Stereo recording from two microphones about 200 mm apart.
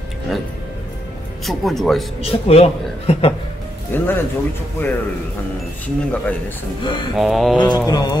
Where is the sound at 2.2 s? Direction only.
30° left (ahead or behind).